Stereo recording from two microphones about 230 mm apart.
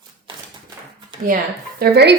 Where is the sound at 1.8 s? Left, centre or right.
Right.